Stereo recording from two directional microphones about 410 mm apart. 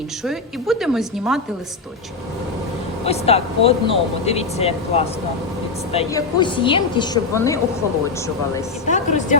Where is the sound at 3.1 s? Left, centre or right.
Centre.